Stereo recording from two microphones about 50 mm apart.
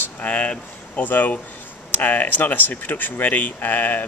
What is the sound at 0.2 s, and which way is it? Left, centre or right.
Speech, left.